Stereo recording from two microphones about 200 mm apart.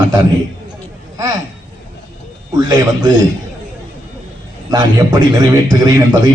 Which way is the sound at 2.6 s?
20° right (ahead or behind).